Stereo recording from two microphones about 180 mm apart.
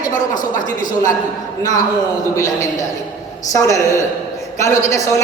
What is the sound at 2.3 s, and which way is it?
A man's voice, 20° left (ahead or behind).